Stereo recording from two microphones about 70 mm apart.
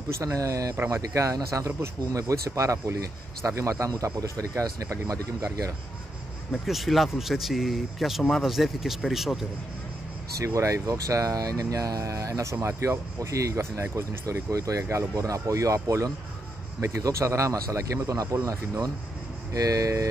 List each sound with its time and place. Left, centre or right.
0.2 s speech: right
6.5 s speech: centre
10.4 s speech: right